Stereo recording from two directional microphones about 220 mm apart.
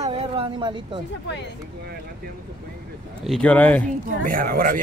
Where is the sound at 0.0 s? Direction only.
25° right (ahead or behind).